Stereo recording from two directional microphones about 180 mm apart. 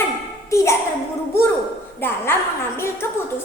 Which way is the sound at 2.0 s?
10° left (ahead or behind).